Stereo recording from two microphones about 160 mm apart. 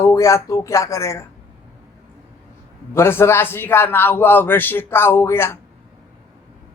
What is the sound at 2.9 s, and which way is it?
Speech, 15° left (ahead or behind).